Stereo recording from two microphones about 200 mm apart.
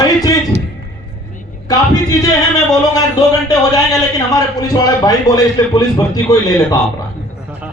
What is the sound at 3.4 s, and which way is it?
Speech, 20° left (ahead or behind).